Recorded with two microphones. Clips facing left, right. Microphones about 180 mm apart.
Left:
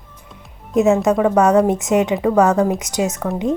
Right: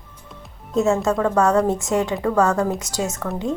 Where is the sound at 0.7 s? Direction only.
20° left (ahead or behind).